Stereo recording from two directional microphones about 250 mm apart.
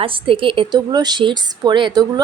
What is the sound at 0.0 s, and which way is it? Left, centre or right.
A woman's voice, right.